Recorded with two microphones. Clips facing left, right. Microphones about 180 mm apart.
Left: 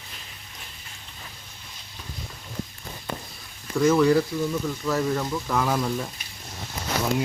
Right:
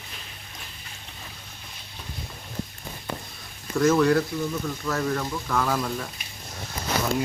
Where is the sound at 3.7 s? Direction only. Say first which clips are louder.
Left 1 dB; 5° left (ahead or behind).